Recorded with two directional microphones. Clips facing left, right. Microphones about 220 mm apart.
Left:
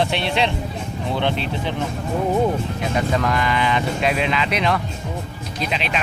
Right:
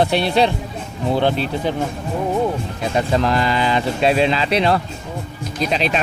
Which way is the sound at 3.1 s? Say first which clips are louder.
Right 3 dB; 30° right (ahead or behind).